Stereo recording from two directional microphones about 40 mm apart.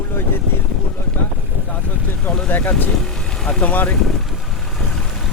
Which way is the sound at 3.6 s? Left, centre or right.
Left.